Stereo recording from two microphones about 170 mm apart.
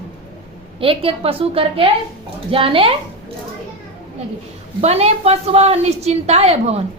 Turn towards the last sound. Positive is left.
turn(degrees=-40)  # may be behind; listen again after turning